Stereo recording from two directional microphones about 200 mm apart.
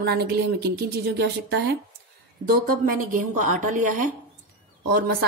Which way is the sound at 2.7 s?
45° right (ahead or behind).